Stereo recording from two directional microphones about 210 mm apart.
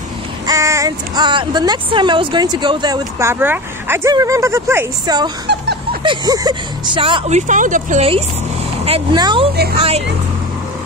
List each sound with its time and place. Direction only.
0.5 s a woman's voice: 15° right (ahead or behind)